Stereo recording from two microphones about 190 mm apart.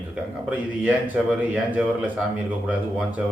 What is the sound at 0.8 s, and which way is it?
A man's voice, 10° right (ahead or behind).